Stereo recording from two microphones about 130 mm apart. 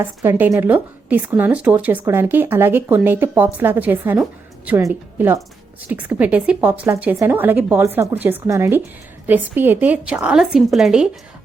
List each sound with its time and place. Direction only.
0.0 s a woman's voice: 20° right (ahead or behind); by 11.1 s 5° right (ahead or behind)